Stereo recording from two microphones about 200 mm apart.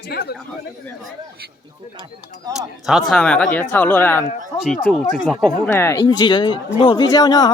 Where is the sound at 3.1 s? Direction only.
5° left (ahead or behind).